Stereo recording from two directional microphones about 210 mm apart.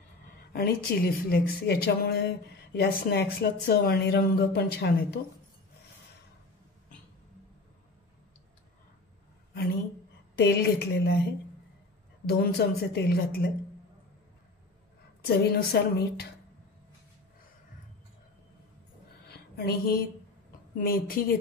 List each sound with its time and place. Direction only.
0.5 s speech: 45° left (ahead or behind)
10.3 s speech: 50° left (ahead or behind)
12.3 s speech: 50° left (ahead or behind)
15.2 s speech: 50° left (ahead or behind)
19.2 s a sound: 50° left (ahead or behind)
20.7 s speech: 45° left (ahead or behind)